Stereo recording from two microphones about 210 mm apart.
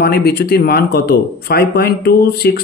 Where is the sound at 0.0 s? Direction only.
50° left (ahead or behind).